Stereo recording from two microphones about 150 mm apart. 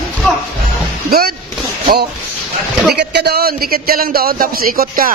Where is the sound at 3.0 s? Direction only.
90° right.